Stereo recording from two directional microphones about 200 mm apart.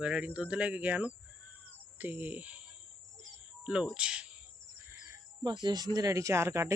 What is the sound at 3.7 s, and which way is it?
Speech, 5° right (ahead or behind).